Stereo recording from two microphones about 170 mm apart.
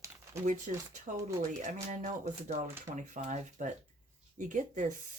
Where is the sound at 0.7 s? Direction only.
45° right (ahead or behind).